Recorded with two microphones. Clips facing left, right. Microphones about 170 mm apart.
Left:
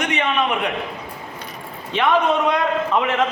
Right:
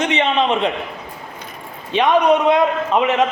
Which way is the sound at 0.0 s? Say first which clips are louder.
Right 4 dB; 20° right (ahead or behind).